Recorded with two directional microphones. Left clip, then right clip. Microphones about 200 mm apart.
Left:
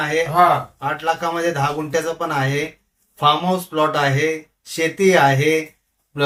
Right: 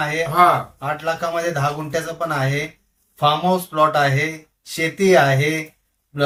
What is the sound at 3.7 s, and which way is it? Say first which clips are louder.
Speech: right 1 dB; 15° left (ahead or behind).